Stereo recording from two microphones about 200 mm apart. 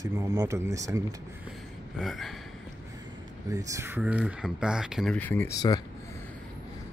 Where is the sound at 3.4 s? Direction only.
15° right (ahead or behind); by 5.8 s 15° left (ahead or behind).